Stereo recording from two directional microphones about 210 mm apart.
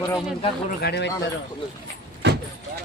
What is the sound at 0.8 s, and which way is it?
Speech, 55° left (ahead or behind).